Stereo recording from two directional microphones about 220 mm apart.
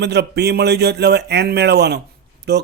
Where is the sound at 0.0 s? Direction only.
50° right (ahead or behind).